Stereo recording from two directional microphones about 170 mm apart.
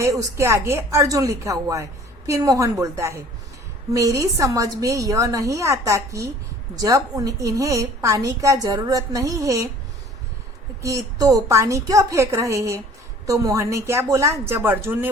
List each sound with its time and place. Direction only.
0.0 s a woman's voice: 20° right (ahead or behind)
10.8 s a woman's voice: 20° right (ahead or behind)